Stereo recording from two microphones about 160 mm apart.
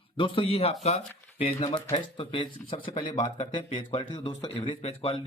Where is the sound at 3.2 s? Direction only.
45° left (ahead or behind).